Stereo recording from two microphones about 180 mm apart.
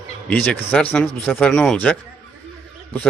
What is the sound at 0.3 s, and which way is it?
A man's voice, 5° left (ahead or behind).